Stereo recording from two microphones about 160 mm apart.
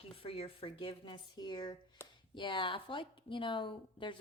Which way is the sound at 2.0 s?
15° left (ahead or behind).